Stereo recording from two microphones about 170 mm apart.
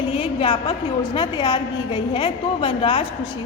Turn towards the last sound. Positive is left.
turn(degrees=30)  # may be behind; listen again after turning